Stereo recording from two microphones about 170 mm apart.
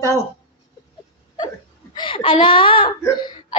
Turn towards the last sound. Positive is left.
turn(degrees=25)  # may be behind; listen again after turning